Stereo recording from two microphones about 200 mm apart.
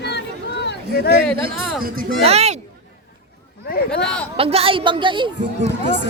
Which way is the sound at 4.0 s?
5° left (ahead or behind).